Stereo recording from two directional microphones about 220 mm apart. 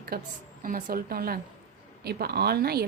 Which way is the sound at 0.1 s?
45° right (ahead or behind).